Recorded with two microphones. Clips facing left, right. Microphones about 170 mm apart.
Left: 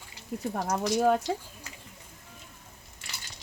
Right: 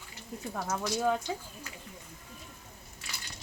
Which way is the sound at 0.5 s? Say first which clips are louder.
Left 4 dB; 40° left (ahead or behind).